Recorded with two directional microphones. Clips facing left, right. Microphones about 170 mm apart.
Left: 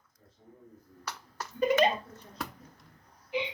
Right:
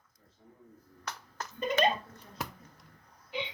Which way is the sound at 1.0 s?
10° left (ahead or behind).